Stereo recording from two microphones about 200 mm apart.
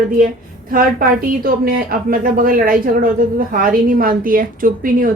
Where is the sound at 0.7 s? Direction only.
45° right (ahead or behind).